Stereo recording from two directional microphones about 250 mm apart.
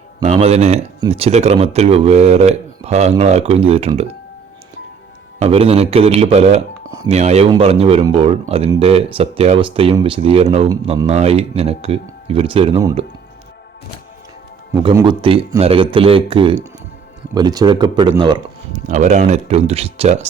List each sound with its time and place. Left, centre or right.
0.2 s speech: right
5.4 s speech: right
14.8 s a man's voice: centre
18.7 s speech: right